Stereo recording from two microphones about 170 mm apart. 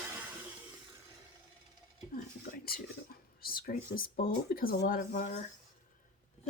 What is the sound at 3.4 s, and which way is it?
Speech, 60° left (ahead or behind).